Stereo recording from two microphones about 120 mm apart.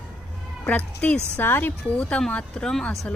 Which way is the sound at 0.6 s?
10° left (ahead or behind).